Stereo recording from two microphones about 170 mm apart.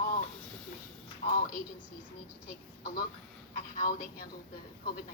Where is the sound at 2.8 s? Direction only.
60° left (ahead or behind).